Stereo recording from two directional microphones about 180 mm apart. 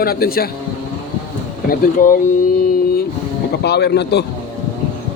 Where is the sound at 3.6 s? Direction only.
65° left (ahead or behind).